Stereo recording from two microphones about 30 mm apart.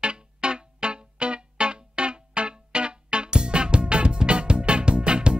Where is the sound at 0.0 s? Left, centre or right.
Right.